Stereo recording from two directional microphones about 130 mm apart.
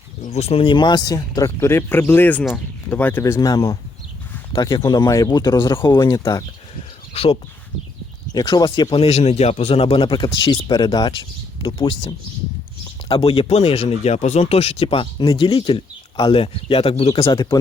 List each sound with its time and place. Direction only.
0.2 s speech: 55° left (ahead or behind); by 6.2 s 35° left (ahead or behind)
7.1 s speech: 50° left (ahead or behind)
8.3 s speech: 30° left (ahead or behind)
9.0 s speech: 55° left (ahead or behind)
10.8 s speech: 35° left (ahead or behind)